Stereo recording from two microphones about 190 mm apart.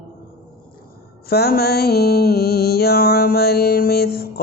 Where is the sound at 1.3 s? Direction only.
55° left (ahead or behind).